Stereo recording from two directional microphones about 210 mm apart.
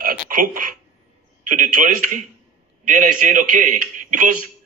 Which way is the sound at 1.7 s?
40° right (ahead or behind).